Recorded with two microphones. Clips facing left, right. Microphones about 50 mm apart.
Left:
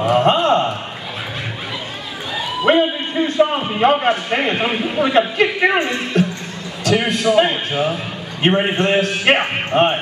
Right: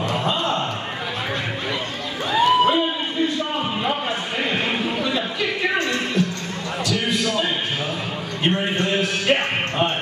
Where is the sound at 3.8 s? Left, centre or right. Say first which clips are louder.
Left 9 dB; left.